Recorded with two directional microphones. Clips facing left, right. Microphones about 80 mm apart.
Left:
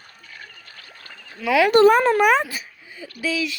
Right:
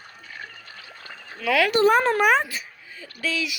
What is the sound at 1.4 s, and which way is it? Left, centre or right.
Speech, centre.